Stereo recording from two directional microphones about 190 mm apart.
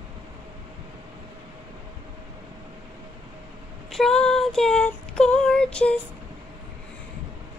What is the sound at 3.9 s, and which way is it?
Child singing, 5° left (ahead or behind).